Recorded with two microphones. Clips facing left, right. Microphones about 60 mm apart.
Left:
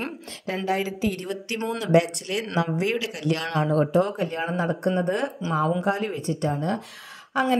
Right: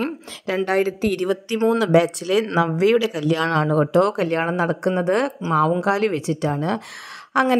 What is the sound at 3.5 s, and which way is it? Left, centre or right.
Speech, right.